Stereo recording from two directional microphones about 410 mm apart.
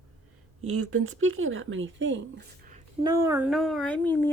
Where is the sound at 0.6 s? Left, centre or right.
Right.